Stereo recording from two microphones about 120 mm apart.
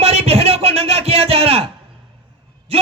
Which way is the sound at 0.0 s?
60° right (ahead or behind).